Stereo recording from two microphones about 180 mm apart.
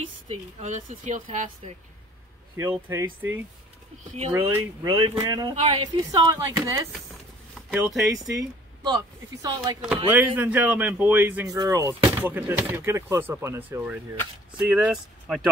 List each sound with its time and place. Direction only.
0.3 s speech: 40° right (ahead or behind)
2.5 s speech: 15° right (ahead or behind)
5.6 s speech: 35° right (ahead or behind)
6.1 s speech: 20° right (ahead or behind)
7.5 s speech: centre (ahead or behind)
8.8 s speech: 25° right (ahead or behind)
10.0 s speech: 10° right (ahead or behind)